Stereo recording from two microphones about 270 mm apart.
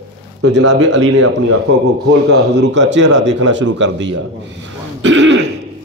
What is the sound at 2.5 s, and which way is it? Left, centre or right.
A man's voice, right.